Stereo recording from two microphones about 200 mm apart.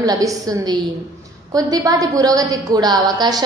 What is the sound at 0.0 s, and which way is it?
A woman's voice, 15° right (ahead or behind).